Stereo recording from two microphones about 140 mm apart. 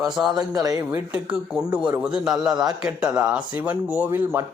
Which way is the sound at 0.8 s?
10° right (ahead or behind).